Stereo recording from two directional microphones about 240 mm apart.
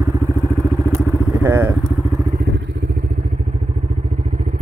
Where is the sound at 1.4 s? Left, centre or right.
Centre.